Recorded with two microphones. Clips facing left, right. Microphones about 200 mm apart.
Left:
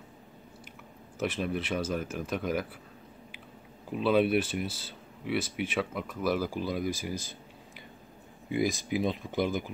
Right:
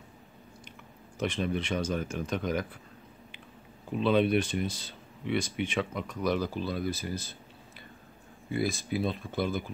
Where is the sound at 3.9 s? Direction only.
5° left (ahead or behind).